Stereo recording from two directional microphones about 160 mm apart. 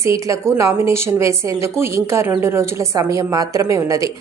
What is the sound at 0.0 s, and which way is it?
A woman's voice, 20° right (ahead or behind).